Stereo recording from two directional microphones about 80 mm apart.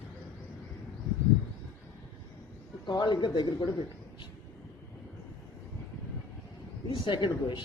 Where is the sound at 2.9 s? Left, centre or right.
Left.